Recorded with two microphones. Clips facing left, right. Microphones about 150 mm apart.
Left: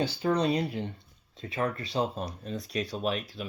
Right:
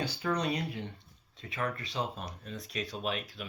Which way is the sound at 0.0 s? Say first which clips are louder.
Left 6 dB; 30° left (ahead or behind).